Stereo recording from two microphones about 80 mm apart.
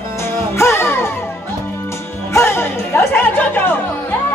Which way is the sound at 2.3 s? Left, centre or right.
Left.